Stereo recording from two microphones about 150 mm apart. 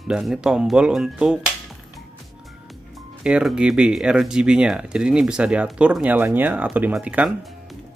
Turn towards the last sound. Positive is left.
turn(degrees=-10)  # may be behind; listen again after turning